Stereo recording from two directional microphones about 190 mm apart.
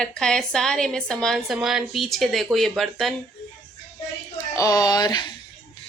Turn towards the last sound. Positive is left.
turn(degrees=20)  # may be behind; listen again after turning